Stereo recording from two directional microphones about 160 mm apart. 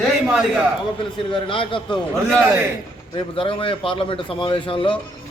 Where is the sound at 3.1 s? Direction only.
35° left (ahead or behind).